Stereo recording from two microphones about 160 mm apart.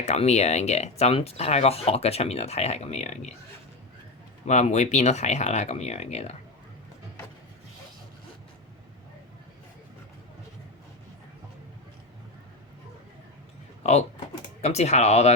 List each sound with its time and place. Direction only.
0.0 s speech: 45° left (ahead or behind)
4.4 s speech: 45° left (ahead or behind)
14.6 s speech: 45° left (ahead or behind)